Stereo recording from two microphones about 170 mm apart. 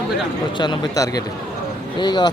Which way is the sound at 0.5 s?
25° left (ahead or behind).